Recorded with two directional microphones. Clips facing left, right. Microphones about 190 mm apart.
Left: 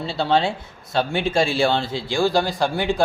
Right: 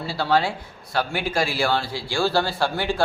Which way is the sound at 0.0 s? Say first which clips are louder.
Left 2 dB; 25° left (ahead or behind).